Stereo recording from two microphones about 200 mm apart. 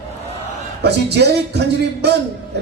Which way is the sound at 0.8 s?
55° right (ahead or behind).